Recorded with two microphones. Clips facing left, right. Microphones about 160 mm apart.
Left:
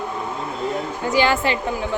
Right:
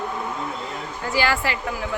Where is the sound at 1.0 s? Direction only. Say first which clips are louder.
Left 4 dB; 20° left (ahead or behind).